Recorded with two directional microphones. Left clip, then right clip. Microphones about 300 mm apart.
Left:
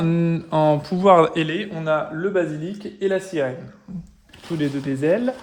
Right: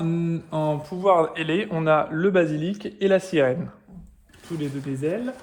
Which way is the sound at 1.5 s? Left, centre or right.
Centre.